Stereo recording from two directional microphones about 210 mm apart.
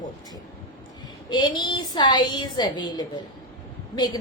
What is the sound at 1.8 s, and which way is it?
A woman's voice, 20° left (ahead or behind).